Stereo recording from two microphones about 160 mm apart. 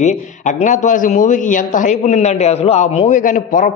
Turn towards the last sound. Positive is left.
turn(degrees=55)  # may be behind; listen again after turning